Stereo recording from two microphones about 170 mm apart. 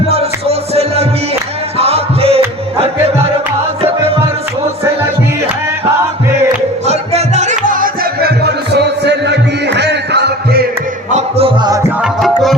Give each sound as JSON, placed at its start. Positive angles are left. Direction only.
{"t": 0.1, "sound": "music", "side_deg": -35}
{"t": 6.8, "sound": "music", "side_deg": -40}
{"t": 11.1, "sound": "music", "side_deg": -35}
{"t": 12.0, "sound": "music", "side_deg": 0}